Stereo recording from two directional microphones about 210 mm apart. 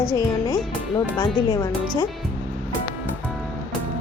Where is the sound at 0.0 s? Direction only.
20° left (ahead or behind).